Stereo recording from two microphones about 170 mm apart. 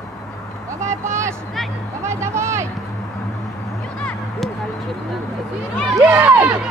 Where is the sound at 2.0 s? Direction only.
15° right (ahead or behind).